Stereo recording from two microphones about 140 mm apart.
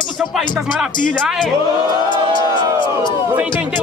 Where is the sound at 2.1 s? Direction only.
35° left (ahead or behind).